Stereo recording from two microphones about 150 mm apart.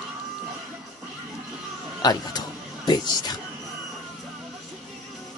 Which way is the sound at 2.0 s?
25° left (ahead or behind).